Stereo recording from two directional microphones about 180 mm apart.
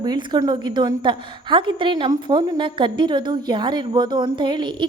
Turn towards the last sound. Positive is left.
turn(degrees=-25)  # may be behind; listen again after turning